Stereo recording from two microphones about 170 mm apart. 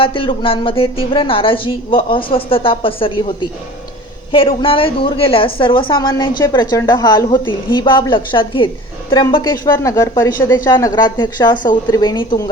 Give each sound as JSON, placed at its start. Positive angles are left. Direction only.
{"t": 0.0, "sound": "a woman's voice", "side_deg": 30}